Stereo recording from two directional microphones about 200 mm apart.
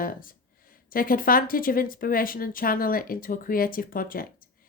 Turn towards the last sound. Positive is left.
turn(degrees=45)  # may be behind; listen again after turning